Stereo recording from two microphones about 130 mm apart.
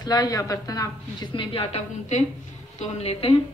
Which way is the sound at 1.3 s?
40° left (ahead or behind).